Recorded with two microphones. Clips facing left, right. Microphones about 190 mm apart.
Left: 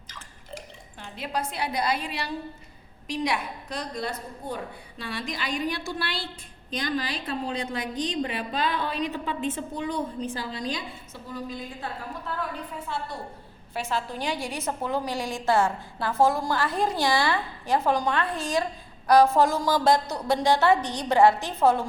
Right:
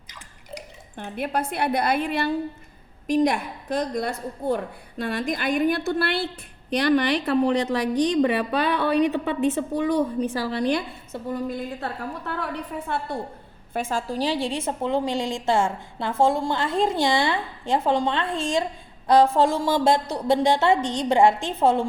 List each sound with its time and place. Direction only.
0.9 s a woman's voice: 55° right (ahead or behind)
13.7 s a woman's voice: 45° right (ahead or behind); by 21.8 s 25° right (ahead or behind)